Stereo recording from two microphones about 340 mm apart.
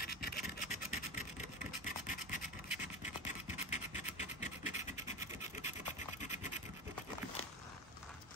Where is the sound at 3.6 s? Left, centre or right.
Centre.